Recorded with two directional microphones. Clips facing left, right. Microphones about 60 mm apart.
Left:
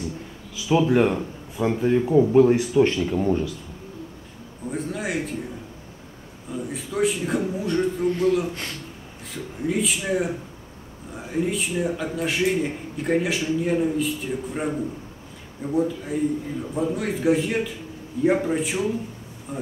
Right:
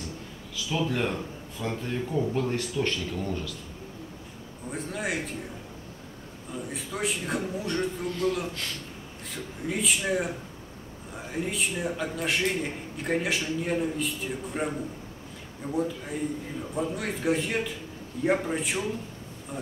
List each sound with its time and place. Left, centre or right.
0.7 s speech: centre
2.5 s speech: centre
3.1 s speech: left
4.6 s a man's voice: centre
6.5 s a man's voice: centre